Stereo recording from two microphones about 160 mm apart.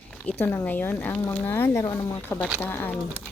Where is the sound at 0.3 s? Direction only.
15° left (ahead or behind).